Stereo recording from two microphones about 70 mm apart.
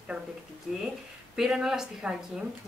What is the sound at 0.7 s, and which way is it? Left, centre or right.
Speech, centre.